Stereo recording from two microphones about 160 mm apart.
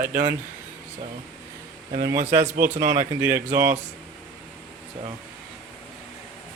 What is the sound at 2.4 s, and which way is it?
Speech, 60° right (ahead or behind).